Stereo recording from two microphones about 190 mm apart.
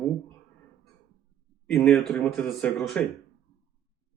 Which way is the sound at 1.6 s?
5° left (ahead or behind).